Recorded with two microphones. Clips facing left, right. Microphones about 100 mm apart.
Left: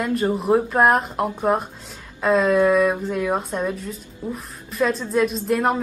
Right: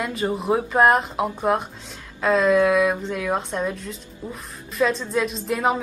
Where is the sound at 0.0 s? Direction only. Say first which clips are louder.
Left 3 dB; centre (ahead or behind).